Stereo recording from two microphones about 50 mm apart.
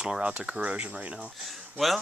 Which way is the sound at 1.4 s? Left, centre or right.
Centre.